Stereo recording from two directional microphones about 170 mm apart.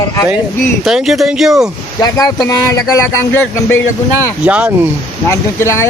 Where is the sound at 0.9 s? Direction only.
Centre (ahead or behind).